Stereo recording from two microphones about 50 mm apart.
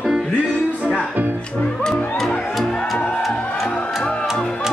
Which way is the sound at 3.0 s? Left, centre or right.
Left.